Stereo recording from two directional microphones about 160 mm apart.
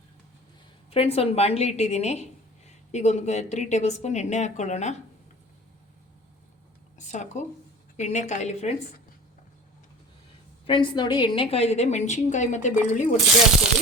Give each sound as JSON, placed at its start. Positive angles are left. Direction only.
{"t": 0.9, "sound": "a woman's voice", "side_deg": 40}
{"t": 7.1, "sound": "a woman's voice", "side_deg": 50}
{"t": 10.7, "sound": "a woman's voice", "side_deg": 30}